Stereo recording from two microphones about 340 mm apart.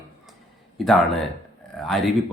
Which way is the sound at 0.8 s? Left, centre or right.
Centre.